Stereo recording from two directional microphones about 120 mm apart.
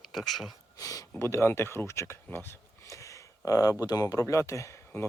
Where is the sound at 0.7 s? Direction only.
30° left (ahead or behind).